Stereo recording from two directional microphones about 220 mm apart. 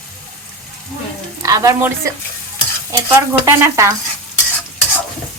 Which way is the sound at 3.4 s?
15° right (ahead or behind).